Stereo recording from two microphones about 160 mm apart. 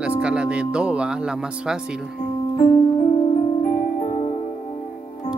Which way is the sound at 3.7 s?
25° left (ahead or behind).